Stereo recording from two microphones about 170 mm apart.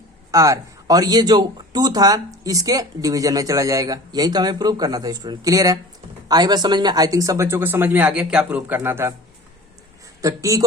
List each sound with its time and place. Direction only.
0.3 s speech: 20° right (ahead or behind)
10.2 s speech: 20° right (ahead or behind)